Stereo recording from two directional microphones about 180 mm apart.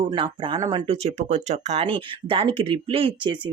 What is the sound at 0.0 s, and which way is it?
Speech, 25° right (ahead or behind).